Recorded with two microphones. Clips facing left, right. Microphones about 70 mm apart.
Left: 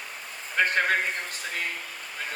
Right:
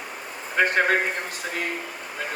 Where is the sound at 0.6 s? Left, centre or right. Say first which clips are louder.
Right 3 dB; right.